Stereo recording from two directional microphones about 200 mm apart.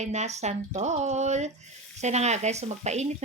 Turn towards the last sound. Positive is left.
turn(degrees=-35)  # may be behind; listen again after turning